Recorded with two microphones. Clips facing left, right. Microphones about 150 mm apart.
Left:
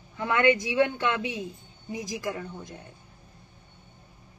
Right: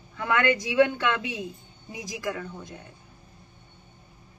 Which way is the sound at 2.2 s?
20° left (ahead or behind).